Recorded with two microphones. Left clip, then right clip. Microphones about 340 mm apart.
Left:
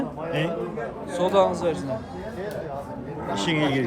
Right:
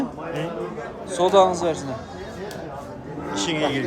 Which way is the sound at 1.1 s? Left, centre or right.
Centre.